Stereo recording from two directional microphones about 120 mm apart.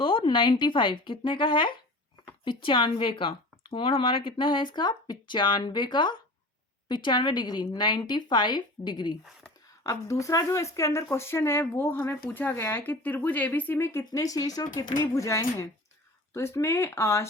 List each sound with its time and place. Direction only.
0.0 s a woman's voice: 45° left (ahead or behind)
9.8 s speech: 25° left (ahead or behind)
14.0 s speech: 30° left (ahead or behind)